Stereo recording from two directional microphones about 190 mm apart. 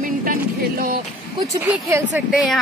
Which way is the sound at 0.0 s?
45° right (ahead or behind).